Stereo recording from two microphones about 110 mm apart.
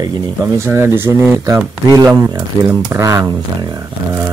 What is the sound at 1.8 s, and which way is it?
Speech, 35° right (ahead or behind).